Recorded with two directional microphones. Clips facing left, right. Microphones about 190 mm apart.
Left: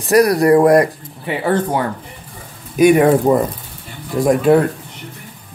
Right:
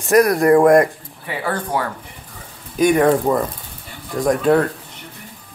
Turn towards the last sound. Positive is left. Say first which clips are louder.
# left 3 dB
turn(degrees=10)  # may be behind; listen again after turning